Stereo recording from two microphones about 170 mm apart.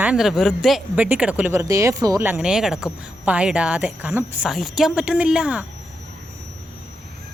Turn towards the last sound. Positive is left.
turn(degrees=-5)  # may be behind; listen again after turning